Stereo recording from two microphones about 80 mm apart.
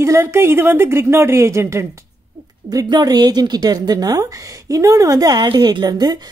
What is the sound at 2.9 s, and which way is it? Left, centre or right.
A woman's voice, right.